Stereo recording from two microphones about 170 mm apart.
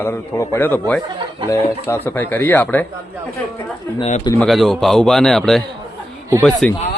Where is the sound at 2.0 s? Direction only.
10° left (ahead or behind).